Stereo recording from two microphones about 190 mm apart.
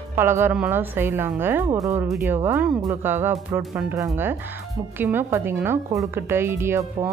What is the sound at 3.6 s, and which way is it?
Speech, centre (ahead or behind).